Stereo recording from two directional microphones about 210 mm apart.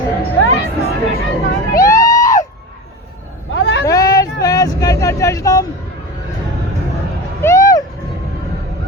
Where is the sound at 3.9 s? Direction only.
15° left (ahead or behind).